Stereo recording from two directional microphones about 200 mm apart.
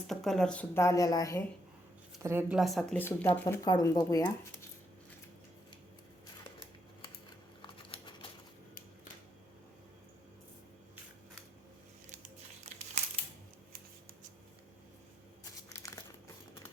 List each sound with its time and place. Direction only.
0.1 s speech: centre (ahead or behind)
2.2 s speech: 10° right (ahead or behind); by 4.3 s 15° left (ahead or behind)
7.6 s typing: 25° left (ahead or behind)